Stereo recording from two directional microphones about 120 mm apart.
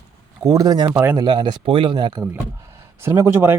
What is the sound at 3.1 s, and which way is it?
Speech, 25° right (ahead or behind).